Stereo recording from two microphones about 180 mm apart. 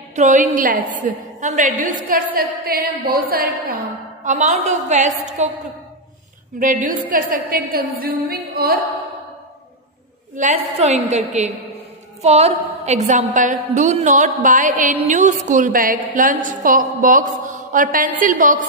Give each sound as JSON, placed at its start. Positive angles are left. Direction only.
{"t": 0.1, "sound": "a woman's voice", "side_deg": -40}
{"t": 2.0, "sound": "a woman's voice", "side_deg": -55}
{"t": 4.2, "sound": "a woman's voice", "side_deg": -40}
{"t": 6.6, "sound": "a woman's voice", "side_deg": -50}
{"t": 10.3, "sound": "a woman's voice", "side_deg": -40}